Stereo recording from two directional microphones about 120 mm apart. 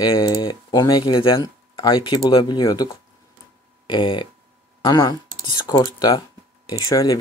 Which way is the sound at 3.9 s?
40° left (ahead or behind).